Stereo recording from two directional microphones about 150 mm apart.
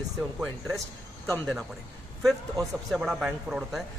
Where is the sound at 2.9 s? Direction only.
5° right (ahead or behind).